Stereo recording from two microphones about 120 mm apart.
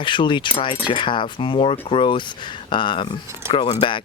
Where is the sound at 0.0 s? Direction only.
45° left (ahead or behind).